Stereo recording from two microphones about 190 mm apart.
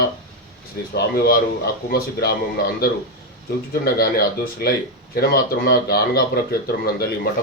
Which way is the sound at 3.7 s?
55° left (ahead or behind).